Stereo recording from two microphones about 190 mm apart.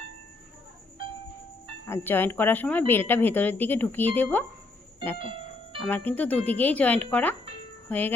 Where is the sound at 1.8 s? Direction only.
10° left (ahead or behind).